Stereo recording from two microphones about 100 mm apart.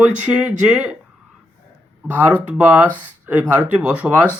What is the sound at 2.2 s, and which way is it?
Speech, 15° right (ahead or behind).